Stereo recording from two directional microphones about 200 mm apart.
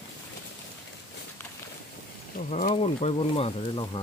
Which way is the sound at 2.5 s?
35° left (ahead or behind).